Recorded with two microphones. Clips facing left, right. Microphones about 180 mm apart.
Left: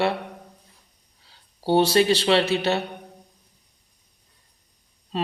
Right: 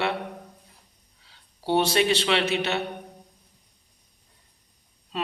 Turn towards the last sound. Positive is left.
turn(degrees=35)  # may be behind; listen again after turning